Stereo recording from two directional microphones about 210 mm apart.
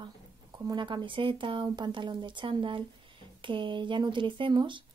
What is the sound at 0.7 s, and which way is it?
Speech, 20° right (ahead or behind).